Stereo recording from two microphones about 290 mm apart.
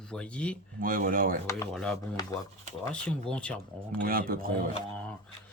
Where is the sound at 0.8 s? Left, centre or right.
Right.